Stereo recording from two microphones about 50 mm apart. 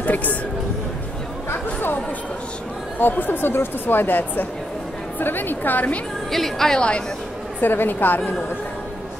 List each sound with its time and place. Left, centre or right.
0.0 s a sound: left
1.5 s chatter: left
3.0 s a woman's voice: left
6.3 s a woman's voice: centre
7.6 s a woman's voice: left